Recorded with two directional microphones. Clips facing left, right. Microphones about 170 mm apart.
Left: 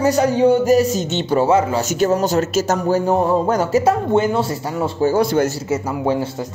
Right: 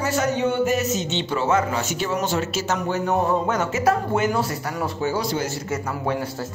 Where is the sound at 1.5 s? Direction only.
30° left (ahead or behind).